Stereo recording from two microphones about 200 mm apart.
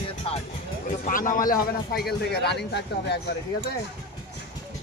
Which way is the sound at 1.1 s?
40° left (ahead or behind).